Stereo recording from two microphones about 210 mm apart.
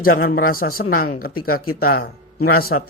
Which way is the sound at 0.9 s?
45° left (ahead or behind).